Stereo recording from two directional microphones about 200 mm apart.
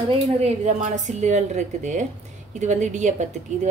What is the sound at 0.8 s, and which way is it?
Speech, 35° right (ahead or behind).